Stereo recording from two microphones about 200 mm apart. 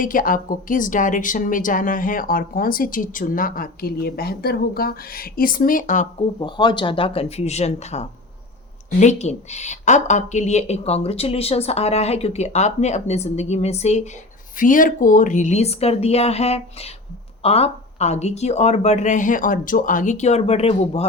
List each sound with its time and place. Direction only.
0.0 s a woman's voice: 45° left (ahead or behind)
6.4 s speech: 20° left (ahead or behind)